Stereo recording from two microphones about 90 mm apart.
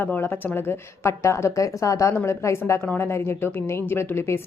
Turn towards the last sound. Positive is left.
turn(degrees=30)  # may be behind; listen again after turning